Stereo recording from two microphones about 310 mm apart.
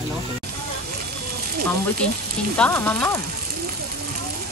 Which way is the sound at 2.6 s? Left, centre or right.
Centre.